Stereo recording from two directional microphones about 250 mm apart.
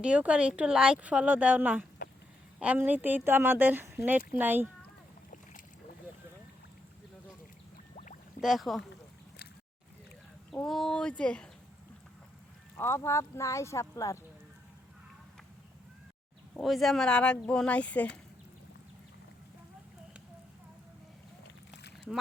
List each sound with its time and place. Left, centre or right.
0.0 s a woman's voice: centre
7.9 s a sound: left
8.4 s a woman's voice: centre
10.5 s a woman's voice: centre
12.7 s speech: centre
16.6 s a woman's voice: centre